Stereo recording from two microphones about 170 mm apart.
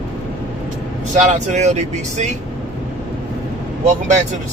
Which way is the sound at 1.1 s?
45° right (ahead or behind).